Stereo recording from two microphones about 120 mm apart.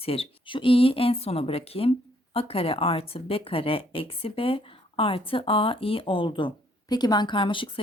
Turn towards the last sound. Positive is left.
turn(degrees=45)  # may be behind; listen again after turning